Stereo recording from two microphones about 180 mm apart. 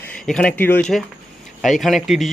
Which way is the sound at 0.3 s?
5° left (ahead or behind).